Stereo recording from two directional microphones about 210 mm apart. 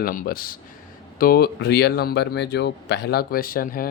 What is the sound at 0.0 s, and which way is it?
Speech, 45° left (ahead or behind).